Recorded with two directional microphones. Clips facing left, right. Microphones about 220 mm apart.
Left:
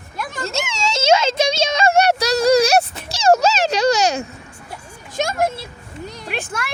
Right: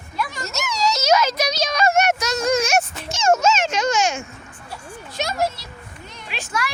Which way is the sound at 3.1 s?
35° left (ahead or behind).